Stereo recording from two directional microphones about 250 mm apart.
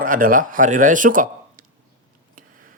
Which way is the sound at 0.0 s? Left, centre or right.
Right.